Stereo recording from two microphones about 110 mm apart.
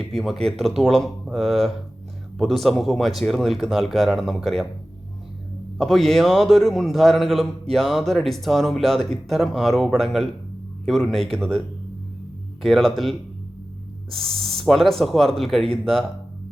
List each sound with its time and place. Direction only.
0.0 s a man's voice: centre (ahead or behind)
5.7 s a man's voice: centre (ahead or behind)
12.6 s a man's voice: centre (ahead or behind)